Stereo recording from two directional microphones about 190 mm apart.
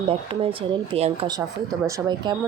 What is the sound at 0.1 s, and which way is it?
Speech, 30° right (ahead or behind).